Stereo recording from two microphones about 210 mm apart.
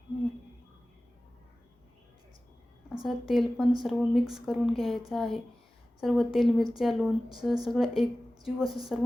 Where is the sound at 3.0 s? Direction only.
Centre (ahead or behind).